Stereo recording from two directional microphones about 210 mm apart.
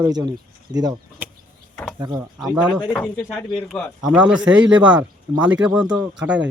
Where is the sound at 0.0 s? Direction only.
20° right (ahead or behind).